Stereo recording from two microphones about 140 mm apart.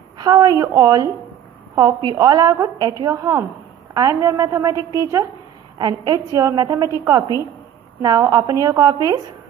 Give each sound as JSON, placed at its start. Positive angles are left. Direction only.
{"t": 0.2, "sound": "a woman's voice", "side_deg": -25}
{"t": 2.1, "sound": "a woman's voice", "side_deg": -25}